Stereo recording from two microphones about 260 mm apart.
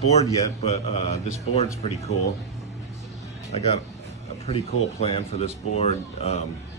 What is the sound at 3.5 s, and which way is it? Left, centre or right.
Speech, left.